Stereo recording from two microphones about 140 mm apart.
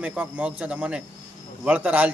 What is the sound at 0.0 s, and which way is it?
A man's voice, 10° right (ahead or behind).